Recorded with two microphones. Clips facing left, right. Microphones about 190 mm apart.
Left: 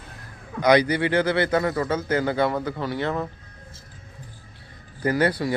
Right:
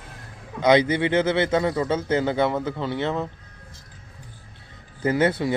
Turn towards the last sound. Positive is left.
turn(degrees=-20)  # may be behind; listen again after turning